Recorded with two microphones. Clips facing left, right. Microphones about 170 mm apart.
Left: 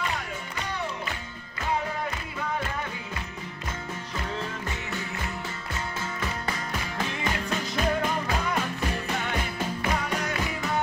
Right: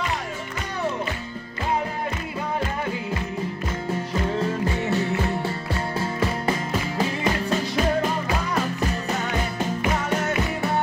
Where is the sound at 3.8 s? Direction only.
30° right (ahead or behind).